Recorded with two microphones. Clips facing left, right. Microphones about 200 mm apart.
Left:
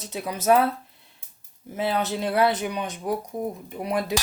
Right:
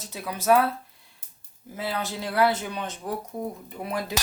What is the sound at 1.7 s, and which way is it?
Speech, 20° left (ahead or behind).